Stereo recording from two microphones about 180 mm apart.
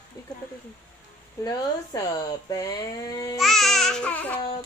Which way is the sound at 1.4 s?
20° left (ahead or behind).